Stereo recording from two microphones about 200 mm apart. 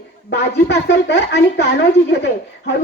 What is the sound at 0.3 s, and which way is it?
Speech, 55° left (ahead or behind).